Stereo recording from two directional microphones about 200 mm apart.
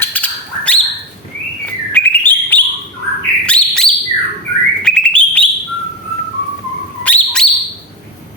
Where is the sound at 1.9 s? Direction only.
10° left (ahead or behind).